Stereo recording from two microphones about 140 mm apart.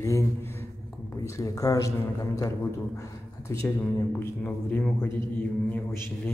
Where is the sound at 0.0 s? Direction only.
20° left (ahead or behind).